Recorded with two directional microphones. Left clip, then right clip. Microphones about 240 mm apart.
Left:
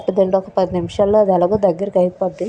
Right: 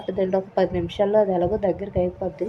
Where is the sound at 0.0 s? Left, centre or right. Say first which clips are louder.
Left 8 dB; left.